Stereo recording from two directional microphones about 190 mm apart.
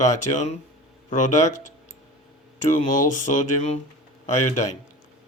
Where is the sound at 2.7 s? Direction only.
40° left (ahead or behind).